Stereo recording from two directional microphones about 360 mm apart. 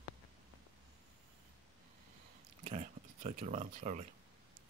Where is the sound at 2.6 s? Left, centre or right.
Centre.